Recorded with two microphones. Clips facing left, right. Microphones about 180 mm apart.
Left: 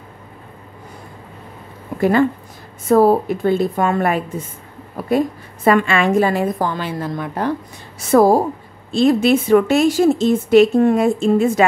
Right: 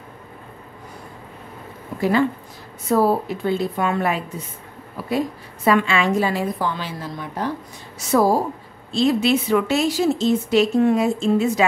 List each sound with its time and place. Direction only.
2.0 s a woman's voice: 50° left (ahead or behind)